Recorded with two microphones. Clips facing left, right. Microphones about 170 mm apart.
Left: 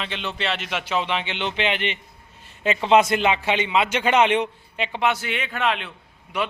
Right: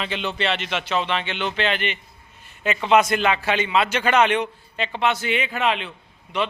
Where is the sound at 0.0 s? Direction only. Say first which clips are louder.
Right 3 dB; centre (ahead or behind).